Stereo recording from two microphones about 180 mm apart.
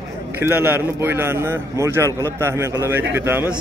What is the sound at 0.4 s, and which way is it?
A man's voice, 10° right (ahead or behind).